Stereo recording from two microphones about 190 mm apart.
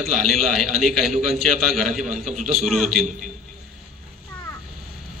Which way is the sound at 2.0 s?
40° right (ahead or behind).